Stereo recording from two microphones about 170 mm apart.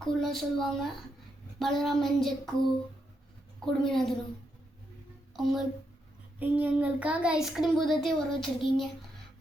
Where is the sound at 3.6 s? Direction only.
5° left (ahead or behind).